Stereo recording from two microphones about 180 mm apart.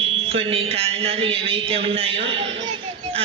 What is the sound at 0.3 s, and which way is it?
A man's voice, 30° right (ahead or behind).